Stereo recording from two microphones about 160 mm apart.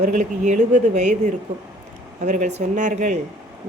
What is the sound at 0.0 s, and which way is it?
Speech, 50° right (ahead or behind).